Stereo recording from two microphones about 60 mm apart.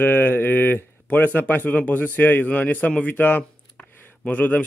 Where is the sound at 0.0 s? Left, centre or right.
Left.